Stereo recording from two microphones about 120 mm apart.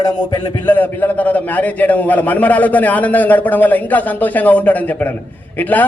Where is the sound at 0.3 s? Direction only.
40° left (ahead or behind).